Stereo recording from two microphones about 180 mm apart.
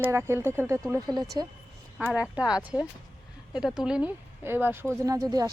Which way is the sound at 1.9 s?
Centre (ahead or behind).